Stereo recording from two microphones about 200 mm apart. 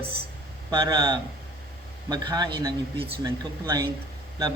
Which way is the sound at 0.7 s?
20° right (ahead or behind).